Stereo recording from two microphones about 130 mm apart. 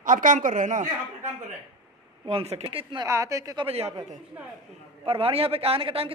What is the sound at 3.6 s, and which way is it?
Speech, 50° right (ahead or behind).